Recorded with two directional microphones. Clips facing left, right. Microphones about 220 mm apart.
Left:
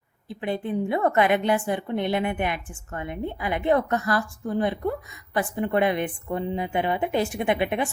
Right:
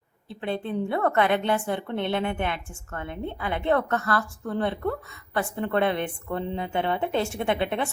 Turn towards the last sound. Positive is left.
turn(degrees=15)  # may be behind; listen again after turning